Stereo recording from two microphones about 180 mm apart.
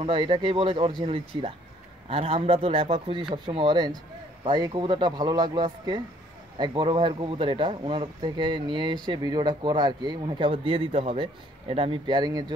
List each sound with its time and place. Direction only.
0.0 s a man's voice: 30° right (ahead or behind)